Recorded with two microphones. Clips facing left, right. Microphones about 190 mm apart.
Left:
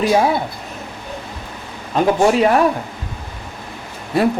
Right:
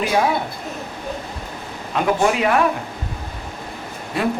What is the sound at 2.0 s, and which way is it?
Speech, 35° left (ahead or behind).